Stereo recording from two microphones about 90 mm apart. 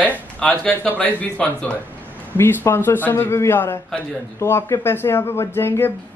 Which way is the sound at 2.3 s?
30° left (ahead or behind).